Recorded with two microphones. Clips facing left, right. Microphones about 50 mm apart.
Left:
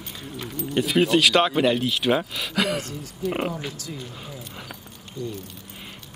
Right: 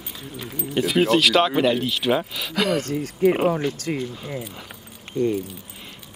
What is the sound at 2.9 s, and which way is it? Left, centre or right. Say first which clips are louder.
Speech: right 10 dB; right.